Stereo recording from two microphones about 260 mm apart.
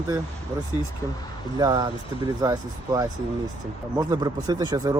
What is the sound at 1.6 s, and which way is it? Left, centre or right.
Speech, centre.